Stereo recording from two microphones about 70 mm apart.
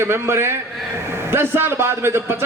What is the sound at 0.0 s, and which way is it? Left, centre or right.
A man's voice, right.